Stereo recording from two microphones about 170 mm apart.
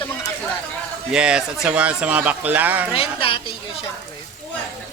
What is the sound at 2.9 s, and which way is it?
Speech, 30° left (ahead or behind).